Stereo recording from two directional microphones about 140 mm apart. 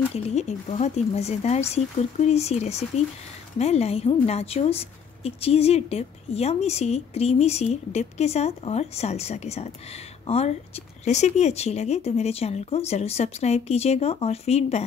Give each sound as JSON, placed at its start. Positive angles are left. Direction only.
{"t": 0.1, "sound": "a woman's voice", "side_deg": 55}